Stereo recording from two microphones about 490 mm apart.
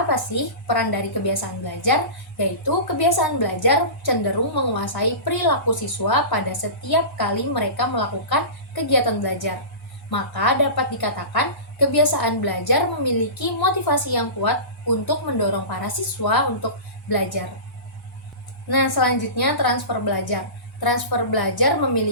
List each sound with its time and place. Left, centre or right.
0.1 s a woman's voice: left
18.7 s a woman's voice: left